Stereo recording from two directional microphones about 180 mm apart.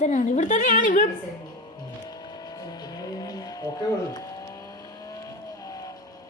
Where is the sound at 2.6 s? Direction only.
20° left (ahead or behind).